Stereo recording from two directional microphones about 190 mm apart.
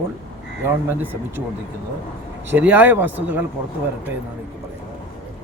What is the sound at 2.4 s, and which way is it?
Speech, 10° right (ahead or behind).